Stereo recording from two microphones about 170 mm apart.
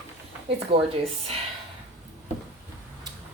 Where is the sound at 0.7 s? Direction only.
30° right (ahead or behind).